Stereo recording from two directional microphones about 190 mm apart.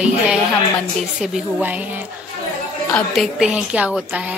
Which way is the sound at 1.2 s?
5° right (ahead or behind).